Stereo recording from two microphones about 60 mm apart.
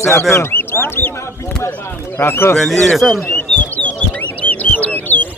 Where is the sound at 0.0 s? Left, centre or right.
Left.